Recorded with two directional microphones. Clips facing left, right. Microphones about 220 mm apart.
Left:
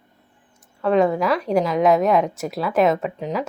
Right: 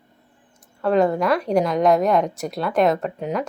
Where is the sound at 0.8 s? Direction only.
Centre (ahead or behind).